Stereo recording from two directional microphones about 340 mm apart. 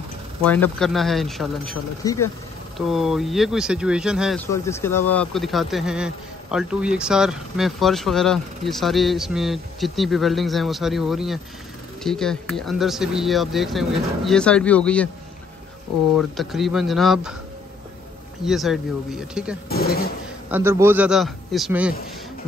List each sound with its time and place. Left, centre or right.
0.5 s speech: centre
16.2 s speech: centre
18.4 s speech: centre
19.7 s speech: left
20.4 s speech: centre